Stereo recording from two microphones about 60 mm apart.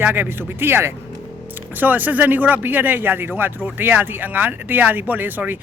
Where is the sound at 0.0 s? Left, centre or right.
Right.